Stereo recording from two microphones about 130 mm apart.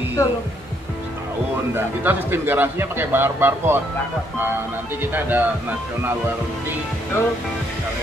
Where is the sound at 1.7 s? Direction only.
15° right (ahead or behind).